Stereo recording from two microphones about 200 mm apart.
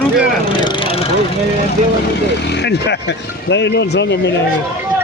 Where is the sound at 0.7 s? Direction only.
25° left (ahead or behind).